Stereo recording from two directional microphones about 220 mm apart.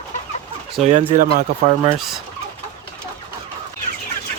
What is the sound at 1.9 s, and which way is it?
Speech, centre (ahead or behind).